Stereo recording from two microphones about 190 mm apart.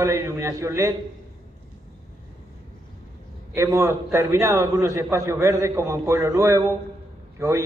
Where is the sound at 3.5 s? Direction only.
15° right (ahead or behind).